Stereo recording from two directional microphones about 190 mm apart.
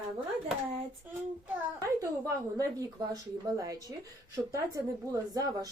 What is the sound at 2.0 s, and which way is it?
A woman's voice, 15° right (ahead or behind).